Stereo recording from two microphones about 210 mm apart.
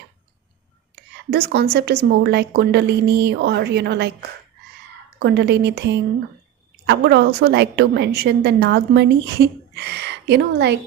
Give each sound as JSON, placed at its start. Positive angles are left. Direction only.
{"t": 0.9, "sound": "a sound", "side_deg": -50}
{"t": 1.7, "sound": "a woman's voice", "side_deg": -50}
{"t": 5.2, "sound": "a woman's voice", "side_deg": -50}